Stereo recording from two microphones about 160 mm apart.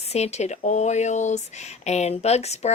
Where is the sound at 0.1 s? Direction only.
45° left (ahead or behind).